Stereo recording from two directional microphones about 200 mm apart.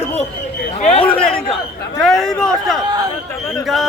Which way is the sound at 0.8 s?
30° left (ahead or behind).